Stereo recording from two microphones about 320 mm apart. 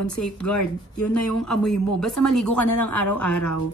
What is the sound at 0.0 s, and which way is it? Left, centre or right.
Speech, left.